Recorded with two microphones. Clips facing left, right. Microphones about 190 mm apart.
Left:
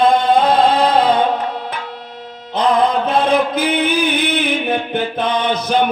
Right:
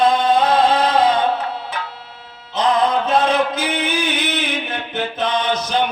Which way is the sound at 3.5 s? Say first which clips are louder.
Left 5 dB; 55° left (ahead or behind).